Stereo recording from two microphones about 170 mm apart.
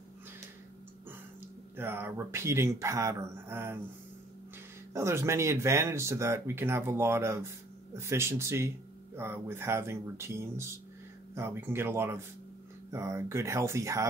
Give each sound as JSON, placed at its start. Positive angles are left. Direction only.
{"t": 1.8, "sound": "speech", "side_deg": -15}
{"t": 4.9, "sound": "speech", "side_deg": -15}